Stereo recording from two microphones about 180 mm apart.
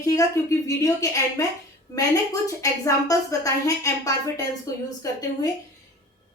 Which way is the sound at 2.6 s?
20° left (ahead or behind).